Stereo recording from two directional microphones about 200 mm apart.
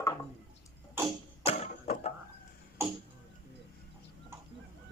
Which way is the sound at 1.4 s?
30° left (ahead or behind).